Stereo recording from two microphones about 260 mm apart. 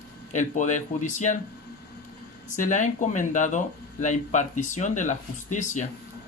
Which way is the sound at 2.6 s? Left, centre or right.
Left.